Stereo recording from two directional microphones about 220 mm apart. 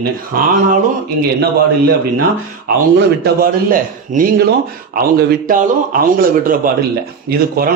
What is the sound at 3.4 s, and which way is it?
Speech, 40° right (ahead or behind).